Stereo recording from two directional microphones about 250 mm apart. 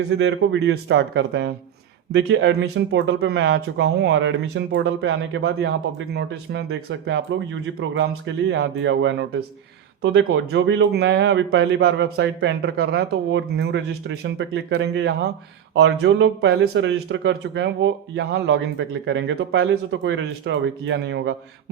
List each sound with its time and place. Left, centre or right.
0.1 s speech: right
8.4 s speech: right